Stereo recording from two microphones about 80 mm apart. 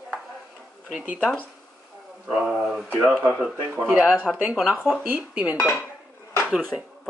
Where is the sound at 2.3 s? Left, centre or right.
Centre.